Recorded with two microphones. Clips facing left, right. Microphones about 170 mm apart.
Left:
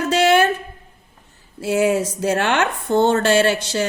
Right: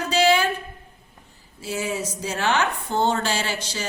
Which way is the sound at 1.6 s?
60° left (ahead or behind).